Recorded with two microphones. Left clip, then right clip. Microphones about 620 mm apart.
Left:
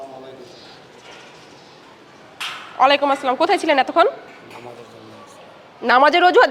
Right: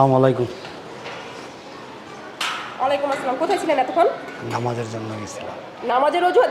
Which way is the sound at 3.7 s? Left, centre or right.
Left.